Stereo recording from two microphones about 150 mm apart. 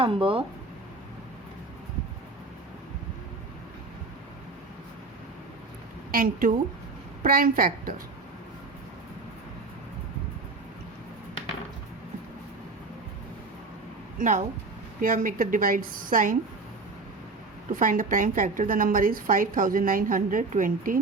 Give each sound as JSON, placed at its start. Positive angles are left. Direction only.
{"t": 0.0, "sound": "speech", "side_deg": -35}
{"t": 6.1, "sound": "a woman's voice", "side_deg": -70}
{"t": 14.2, "sound": "a woman's voice", "side_deg": -55}
{"t": 17.7, "sound": "a woman's voice", "side_deg": -60}